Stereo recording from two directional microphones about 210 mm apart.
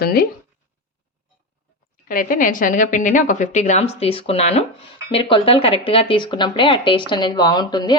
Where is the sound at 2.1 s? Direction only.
40° left (ahead or behind).